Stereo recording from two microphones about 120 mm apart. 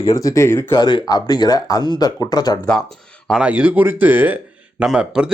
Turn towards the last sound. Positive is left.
turn(degrees=-5)  # may be behind; listen again after turning